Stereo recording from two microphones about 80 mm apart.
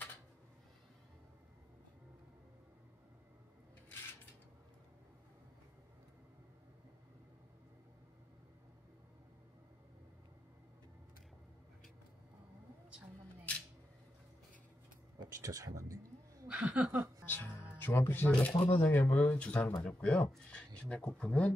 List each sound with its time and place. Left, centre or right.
15.1 s speech: right
16.4 s a sound: centre
17.8 s speech: left
18.3 s speech: centre